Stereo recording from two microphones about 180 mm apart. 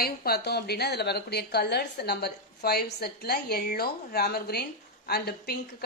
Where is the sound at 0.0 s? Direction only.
60° left (ahead or behind).